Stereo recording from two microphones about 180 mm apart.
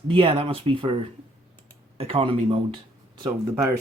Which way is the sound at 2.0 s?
35° right (ahead or behind).